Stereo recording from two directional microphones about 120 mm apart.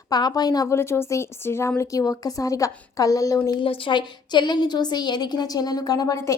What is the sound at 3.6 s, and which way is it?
A woman's voice, 45° left (ahead or behind).